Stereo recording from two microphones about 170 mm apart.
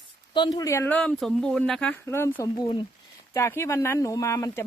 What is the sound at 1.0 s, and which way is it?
Speech, 5° left (ahead or behind).